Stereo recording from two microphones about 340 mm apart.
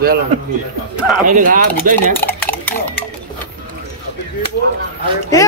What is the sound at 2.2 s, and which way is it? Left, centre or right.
Stir, centre.